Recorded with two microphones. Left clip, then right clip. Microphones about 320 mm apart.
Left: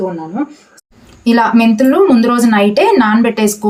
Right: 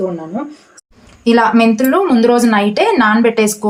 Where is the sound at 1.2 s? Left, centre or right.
Centre.